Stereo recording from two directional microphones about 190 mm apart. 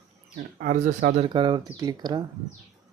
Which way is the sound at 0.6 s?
45° right (ahead or behind).